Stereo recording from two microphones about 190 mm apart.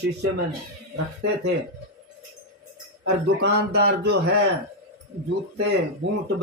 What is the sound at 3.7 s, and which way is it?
Speech, 55° right (ahead or behind).